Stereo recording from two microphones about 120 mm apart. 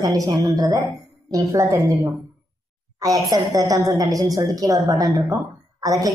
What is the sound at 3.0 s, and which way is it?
A woman's voice, 30° right (ahead or behind).